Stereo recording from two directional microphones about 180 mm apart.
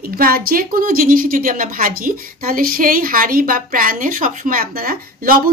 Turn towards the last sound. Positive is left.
turn(degrees=-50)  # may be behind; listen again after turning